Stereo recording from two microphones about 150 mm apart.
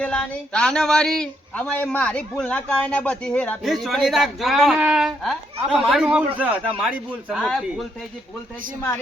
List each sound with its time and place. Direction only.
0.0 s speech: 5° left (ahead or behind)
7.4 s speech: 5° left (ahead or behind)